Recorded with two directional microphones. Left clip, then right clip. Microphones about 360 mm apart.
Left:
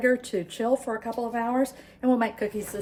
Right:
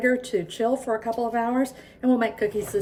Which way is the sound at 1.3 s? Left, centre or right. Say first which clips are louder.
Right 2 dB; left.